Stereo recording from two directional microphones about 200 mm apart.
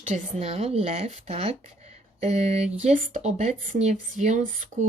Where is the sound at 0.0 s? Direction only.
35° right (ahead or behind).